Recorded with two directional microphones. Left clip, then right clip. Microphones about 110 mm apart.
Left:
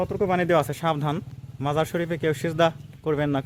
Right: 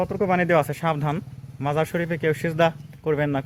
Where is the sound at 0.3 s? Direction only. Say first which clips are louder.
Right 2 dB; 10° left (ahead or behind).